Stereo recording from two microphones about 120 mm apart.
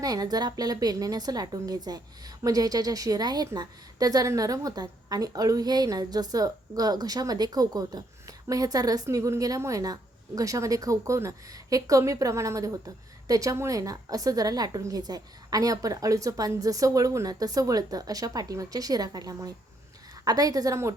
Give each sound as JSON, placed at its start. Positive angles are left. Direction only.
{"t": 0.0, "sound": "a woman's voice", "side_deg": -30}